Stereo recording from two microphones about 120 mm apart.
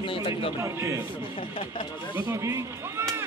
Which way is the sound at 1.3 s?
50° left (ahead or behind).